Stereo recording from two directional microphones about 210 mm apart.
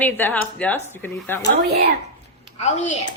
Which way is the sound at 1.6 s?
50° right (ahead or behind).